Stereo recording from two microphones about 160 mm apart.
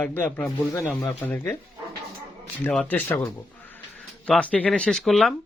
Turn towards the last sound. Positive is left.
turn(degrees=0)  # may be behind; listen again after turning